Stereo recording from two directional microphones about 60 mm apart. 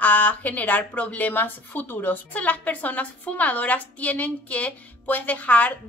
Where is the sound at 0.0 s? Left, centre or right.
Left.